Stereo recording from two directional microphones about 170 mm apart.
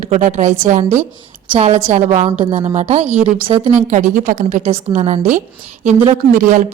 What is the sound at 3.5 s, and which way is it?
Speech, 35° right (ahead or behind).